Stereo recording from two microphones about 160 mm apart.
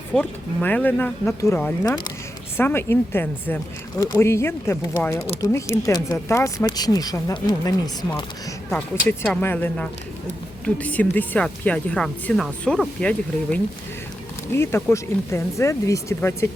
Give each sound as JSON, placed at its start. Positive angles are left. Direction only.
{"t": 0.2, "sound": "speech", "side_deg": 10}
{"t": 8.7, "sound": "speech", "side_deg": 10}